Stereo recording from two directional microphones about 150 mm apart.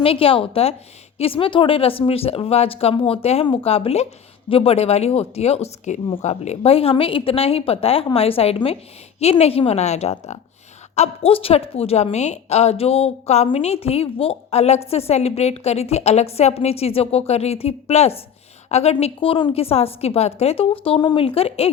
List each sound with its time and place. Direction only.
0.0 s a woman's voice: 40° left (ahead or behind)